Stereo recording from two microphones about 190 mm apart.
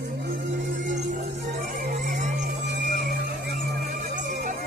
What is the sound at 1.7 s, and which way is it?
Music, 45° right (ahead or behind).